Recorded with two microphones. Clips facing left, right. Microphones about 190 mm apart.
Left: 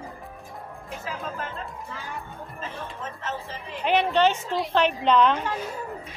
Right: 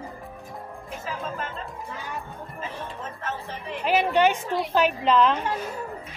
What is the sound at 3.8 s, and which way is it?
A woman's voice, 5° right (ahead or behind).